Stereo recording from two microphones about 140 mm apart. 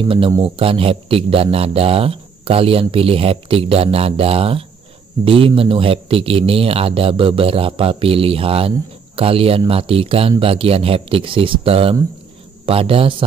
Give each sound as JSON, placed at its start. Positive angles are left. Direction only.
{"t": 0.0, "sound": "a man's voice", "side_deg": -40}